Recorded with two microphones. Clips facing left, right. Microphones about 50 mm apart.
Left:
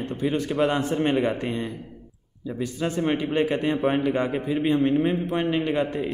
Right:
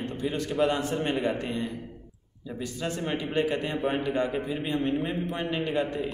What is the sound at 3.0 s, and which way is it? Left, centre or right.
A man's voice, left.